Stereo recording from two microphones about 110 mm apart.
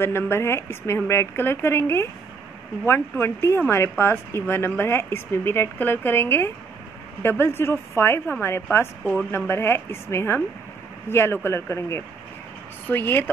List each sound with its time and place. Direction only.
0.0 s speech: 20° left (ahead or behind)